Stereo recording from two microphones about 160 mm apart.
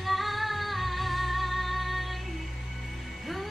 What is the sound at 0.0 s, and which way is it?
Music, centre (ahead or behind).